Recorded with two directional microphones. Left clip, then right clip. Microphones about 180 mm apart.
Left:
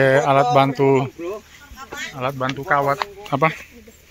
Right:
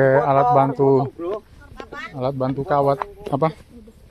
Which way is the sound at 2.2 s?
15° right (ahead or behind).